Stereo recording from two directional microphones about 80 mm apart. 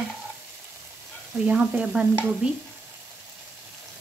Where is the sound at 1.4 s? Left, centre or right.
Centre.